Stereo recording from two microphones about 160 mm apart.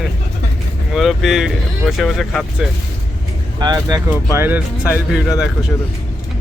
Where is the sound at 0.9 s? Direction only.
Centre (ahead or behind).